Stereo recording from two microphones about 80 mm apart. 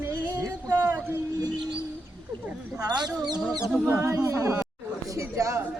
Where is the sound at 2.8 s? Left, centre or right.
Right.